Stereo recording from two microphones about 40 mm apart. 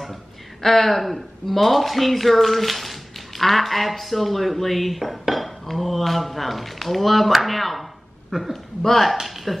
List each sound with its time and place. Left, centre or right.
0.6 s speech: centre
8.3 s speech: centre
8.8 s speech: centre